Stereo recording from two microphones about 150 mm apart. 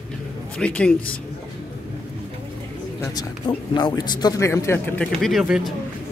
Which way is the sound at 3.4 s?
30° left (ahead or behind).